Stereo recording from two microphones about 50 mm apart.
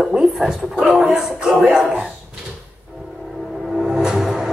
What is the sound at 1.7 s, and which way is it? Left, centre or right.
Speech, centre.